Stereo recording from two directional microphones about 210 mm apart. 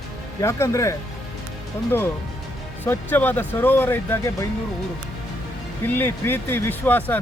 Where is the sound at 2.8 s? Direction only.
10° left (ahead or behind).